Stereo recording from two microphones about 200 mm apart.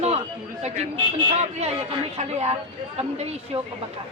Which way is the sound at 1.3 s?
30° right (ahead or behind).